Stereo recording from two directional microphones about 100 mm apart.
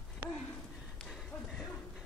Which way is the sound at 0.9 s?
5° left (ahead or behind).